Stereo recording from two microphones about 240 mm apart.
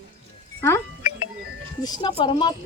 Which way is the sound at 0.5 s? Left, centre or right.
Centre.